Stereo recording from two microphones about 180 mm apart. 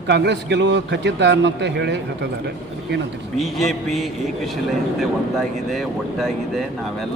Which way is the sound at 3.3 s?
Centre (ahead or behind).